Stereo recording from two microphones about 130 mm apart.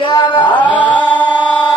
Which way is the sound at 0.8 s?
10° left (ahead or behind).